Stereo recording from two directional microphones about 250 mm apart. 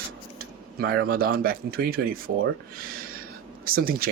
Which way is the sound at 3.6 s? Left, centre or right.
Right.